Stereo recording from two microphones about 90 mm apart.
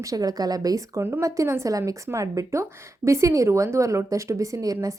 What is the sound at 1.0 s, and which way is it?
A woman's voice, 30° right (ahead or behind).